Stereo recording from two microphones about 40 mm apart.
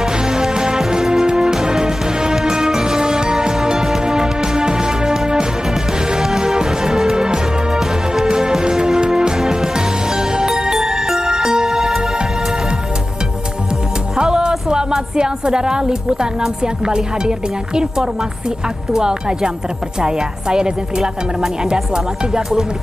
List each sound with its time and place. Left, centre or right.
0.0 s music: centre
14.1 s music: centre
14.7 s a woman's voice: centre